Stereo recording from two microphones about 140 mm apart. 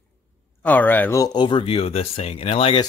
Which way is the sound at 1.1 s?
30° left (ahead or behind).